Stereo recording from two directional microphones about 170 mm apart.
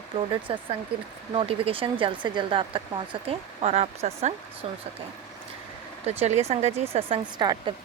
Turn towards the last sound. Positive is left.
turn(degrees=-30)  # may be behind; listen again after turning